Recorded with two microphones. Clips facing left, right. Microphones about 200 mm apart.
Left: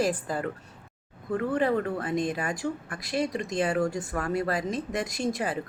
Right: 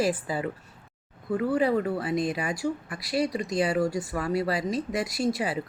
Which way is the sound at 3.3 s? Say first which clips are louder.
Right 1 dB; centre (ahead or behind).